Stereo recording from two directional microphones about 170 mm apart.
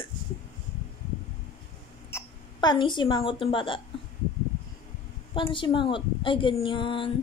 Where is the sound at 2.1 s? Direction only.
25° left (ahead or behind).